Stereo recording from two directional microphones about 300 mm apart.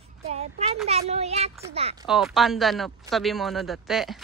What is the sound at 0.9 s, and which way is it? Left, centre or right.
Speech, right.